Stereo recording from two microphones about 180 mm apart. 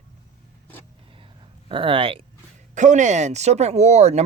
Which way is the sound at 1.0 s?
30° right (ahead or behind).